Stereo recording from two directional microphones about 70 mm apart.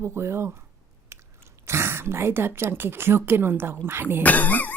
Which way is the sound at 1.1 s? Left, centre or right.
Right.